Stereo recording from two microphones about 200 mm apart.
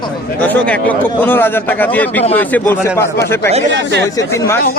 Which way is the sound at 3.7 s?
60° right (ahead or behind).